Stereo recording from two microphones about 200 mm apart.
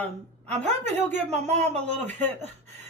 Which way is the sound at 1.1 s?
35° right (ahead or behind).